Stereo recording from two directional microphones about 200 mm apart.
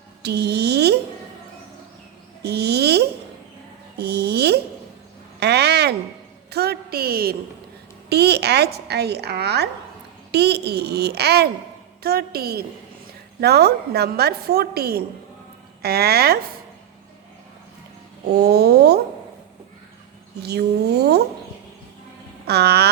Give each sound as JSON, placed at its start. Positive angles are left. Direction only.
{"t": 0.2, "sound": "speech", "side_deg": -55}
{"t": 2.4, "sound": "a child's voice", "side_deg": -55}
{"t": 3.9, "sound": "a sound", "side_deg": -55}
{"t": 8.1, "sound": "a woman's voice", "side_deg": -55}
{"t": 18.3, "sound": "a woman's voice", "side_deg": -55}
{"t": 20.4, "sound": "a woman's voice", "side_deg": -55}
{"t": 22.4, "sound": "a woman's voice", "side_deg": -55}